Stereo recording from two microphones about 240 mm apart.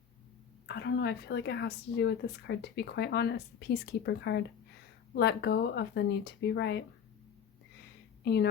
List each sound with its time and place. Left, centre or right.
0.7 s a woman's voice: left
8.2 s a woman's voice: left